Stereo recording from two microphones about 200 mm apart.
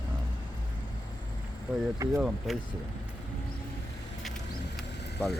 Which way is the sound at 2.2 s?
5° right (ahead or behind).